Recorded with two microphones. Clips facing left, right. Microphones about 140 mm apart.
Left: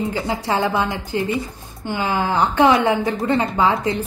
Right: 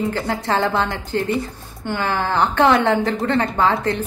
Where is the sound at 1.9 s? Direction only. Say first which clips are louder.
Left 1 dB; 15° left (ahead or behind).